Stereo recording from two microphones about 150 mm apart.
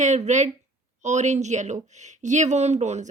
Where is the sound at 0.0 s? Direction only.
50° right (ahead or behind).